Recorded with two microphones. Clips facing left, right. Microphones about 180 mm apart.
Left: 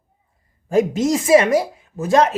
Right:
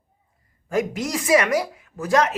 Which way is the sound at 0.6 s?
25° left (ahead or behind).